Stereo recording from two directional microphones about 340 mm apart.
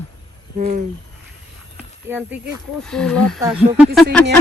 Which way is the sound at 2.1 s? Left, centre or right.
Centre.